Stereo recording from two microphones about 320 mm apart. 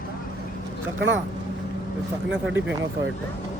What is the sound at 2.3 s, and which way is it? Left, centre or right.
Speech, centre.